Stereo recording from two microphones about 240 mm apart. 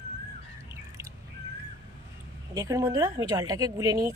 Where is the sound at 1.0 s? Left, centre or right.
Centre.